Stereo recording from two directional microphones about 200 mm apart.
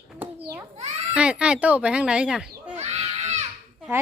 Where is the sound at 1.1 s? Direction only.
5° right (ahead or behind).